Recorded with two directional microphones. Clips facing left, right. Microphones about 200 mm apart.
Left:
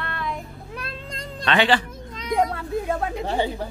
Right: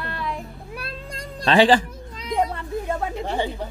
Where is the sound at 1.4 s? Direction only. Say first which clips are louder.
Right 4 dB; 35° right (ahead or behind).